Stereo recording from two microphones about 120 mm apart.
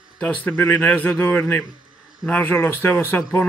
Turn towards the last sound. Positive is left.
turn(degrees=15)  # may be behind; listen again after turning